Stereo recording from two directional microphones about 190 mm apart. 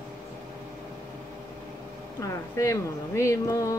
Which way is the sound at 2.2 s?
15° left (ahead or behind).